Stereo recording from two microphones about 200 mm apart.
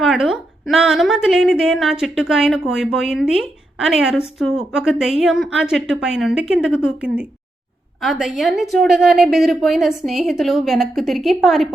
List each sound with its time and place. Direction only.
0.0 s a woman's voice: centre (ahead or behind)